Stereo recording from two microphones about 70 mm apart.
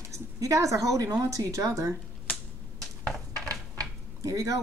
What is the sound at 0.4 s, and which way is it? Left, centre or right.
Speech, right.